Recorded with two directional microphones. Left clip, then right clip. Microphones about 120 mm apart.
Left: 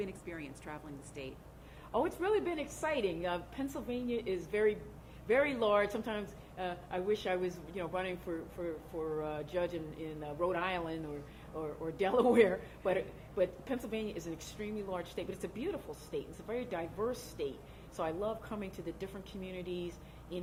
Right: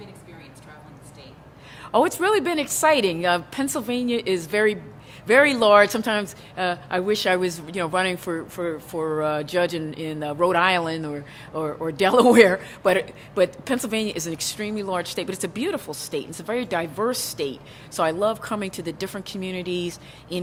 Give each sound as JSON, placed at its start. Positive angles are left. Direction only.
{"t": 1.9, "sound": "a woman's voice", "side_deg": -25}
{"t": 11.5, "sound": "a woman's voice", "side_deg": -30}